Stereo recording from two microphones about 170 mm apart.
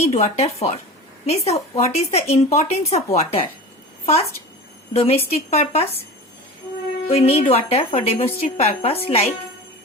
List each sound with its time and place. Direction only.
0.0 s speech: 40° left (ahead or behind)
7.1 s speech: 35° left (ahead or behind)